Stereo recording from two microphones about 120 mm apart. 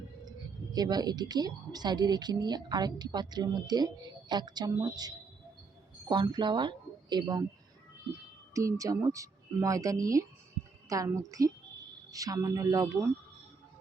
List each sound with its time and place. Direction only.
0.3 s a woman's voice: 35° right (ahead or behind)
8.5 s speech: 25° right (ahead or behind)